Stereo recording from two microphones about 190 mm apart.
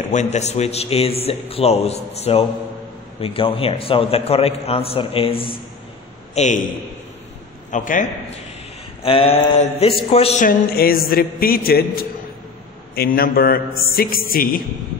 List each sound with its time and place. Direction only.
0.1 s a man's voice: 40° left (ahead or behind)
6.3 s a man's voice: 40° left (ahead or behind)
7.7 s a man's voice: 45° left (ahead or behind)
9.0 s a man's voice: 30° left (ahead or behind)
10.4 s a man's voice: 50° left (ahead or behind)